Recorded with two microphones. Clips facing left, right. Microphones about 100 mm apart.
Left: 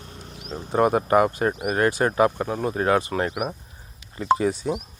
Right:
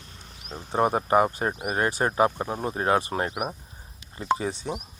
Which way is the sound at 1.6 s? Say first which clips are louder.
Left 3 dB; 25° right (ahead or behind).